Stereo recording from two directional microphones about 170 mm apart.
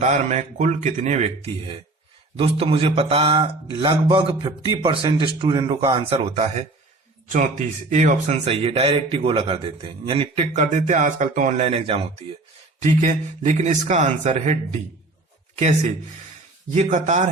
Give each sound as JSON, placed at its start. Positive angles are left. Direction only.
{"t": 0.0, "sound": "speech", "side_deg": -45}